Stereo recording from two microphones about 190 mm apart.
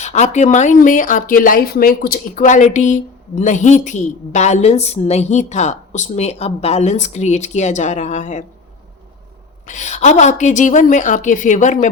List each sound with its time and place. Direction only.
0.0 s speech: 35° left (ahead or behind)
9.6 s speech: 40° left (ahead or behind)